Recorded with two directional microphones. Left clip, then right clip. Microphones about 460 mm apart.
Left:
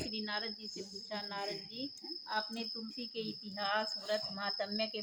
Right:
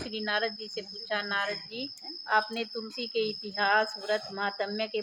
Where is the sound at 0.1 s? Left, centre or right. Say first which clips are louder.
Right 9 dB; centre.